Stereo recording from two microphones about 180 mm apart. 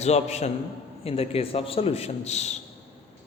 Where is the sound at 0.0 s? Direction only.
35° left (ahead or behind).